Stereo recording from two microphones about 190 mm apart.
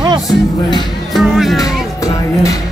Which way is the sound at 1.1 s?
Centre (ahead or behind).